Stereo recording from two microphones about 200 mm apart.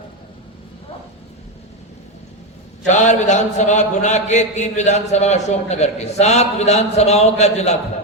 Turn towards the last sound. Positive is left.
turn(degrees=35)  # may be behind; listen again after turning